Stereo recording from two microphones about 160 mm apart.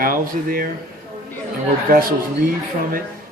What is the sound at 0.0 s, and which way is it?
Speech, 65° right (ahead or behind).